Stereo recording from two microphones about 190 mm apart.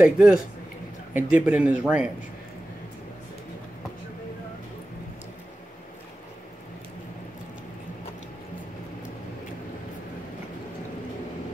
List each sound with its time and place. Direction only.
0.0 s a man's voice: 5° right (ahead or behind)